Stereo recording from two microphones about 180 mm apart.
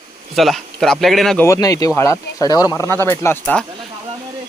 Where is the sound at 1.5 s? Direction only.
20° left (ahead or behind).